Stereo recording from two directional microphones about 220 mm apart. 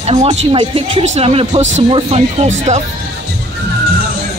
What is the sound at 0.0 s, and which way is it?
Speech, 25° right (ahead or behind).